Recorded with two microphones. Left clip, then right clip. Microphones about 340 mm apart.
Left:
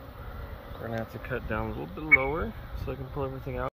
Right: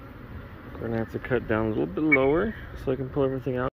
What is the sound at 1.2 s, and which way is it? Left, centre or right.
Speech, centre.